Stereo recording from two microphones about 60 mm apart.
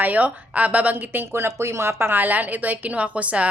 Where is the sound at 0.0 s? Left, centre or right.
Right.